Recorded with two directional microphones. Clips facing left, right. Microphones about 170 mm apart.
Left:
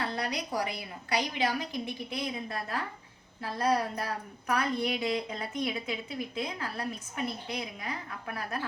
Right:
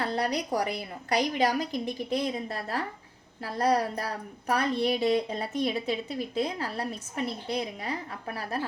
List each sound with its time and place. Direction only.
0.0 s a woman's voice: 35° right (ahead or behind)